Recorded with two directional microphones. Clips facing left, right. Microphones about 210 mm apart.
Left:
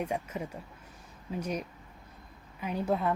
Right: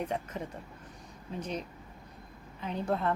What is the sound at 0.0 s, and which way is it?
A woman's voice, 10° left (ahead or behind).